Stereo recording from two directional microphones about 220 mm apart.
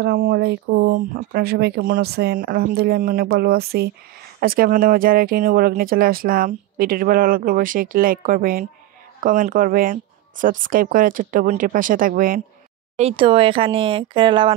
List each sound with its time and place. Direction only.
0.0 s speech: 45° right (ahead or behind)
0.9 s speech: 40° right (ahead or behind)
12.9 s speech: 25° right (ahead or behind)